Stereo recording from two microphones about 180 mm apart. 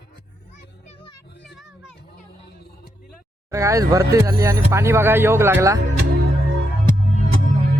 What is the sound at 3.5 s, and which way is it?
Speech, 15° right (ahead or behind).